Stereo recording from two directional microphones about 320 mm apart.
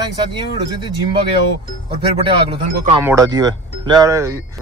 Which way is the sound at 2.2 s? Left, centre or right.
Centre.